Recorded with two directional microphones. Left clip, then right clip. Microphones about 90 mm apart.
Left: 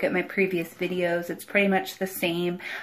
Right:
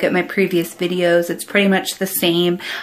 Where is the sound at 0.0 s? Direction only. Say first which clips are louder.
Right 7 dB; 35° right (ahead or behind).